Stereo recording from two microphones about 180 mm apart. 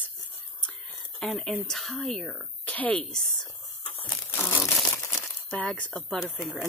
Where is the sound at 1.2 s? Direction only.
Centre (ahead or behind).